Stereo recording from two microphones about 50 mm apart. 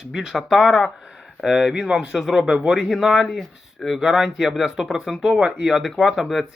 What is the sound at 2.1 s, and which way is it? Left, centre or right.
Speech, centre.